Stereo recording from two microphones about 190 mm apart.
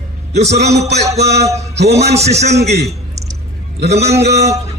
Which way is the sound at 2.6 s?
60° right (ahead or behind).